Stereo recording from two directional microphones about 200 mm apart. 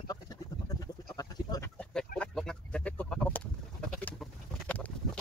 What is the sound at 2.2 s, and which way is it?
Bird, 5° left (ahead or behind).